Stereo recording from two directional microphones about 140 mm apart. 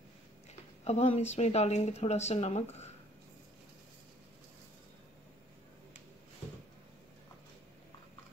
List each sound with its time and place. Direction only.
0.8 s speech: 50° left (ahead or behind)